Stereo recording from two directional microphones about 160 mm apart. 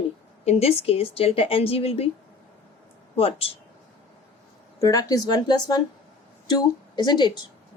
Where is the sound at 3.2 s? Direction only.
40° left (ahead or behind).